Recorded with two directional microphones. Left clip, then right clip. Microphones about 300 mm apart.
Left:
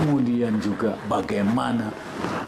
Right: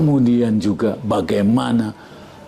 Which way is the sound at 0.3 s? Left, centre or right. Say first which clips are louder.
Right 6 dB; right.